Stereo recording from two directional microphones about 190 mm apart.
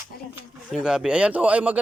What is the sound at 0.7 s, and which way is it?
A man's voice, centre (ahead or behind).